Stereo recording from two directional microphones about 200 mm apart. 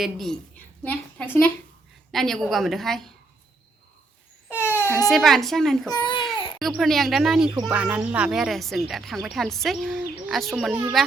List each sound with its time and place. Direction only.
0.0 s a woman's voice: centre (ahead or behind)
4.4 s crying: 10° left (ahead or behind)
4.7 s baby cry: 10° right (ahead or behind)
5.0 s speech: centre (ahead or behind)
5.9 s speech: 25° left (ahead or behind)
6.6 s speech: centre (ahead or behind)